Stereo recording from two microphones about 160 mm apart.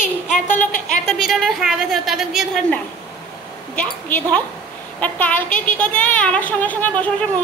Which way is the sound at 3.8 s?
10° left (ahead or behind).